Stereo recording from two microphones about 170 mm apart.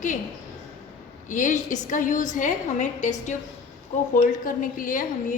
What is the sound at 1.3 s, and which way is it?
A woman's voice, 45° left (ahead or behind).